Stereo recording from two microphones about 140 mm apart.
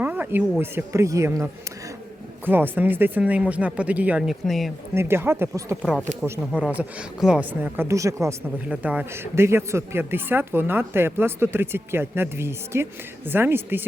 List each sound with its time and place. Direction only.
0.0 s a sound: 15° right (ahead or behind)
0.6 s a man's voice: 20° right (ahead or behind); by 4.7 s centre (ahead or behind)
4.9 s a man's voice: 15° right (ahead or behind)
5.8 s a man's voice: 5° right (ahead or behind); by 8.4 s 20° right (ahead or behind)
8.5 s a man's voice: 10° right (ahead or behind)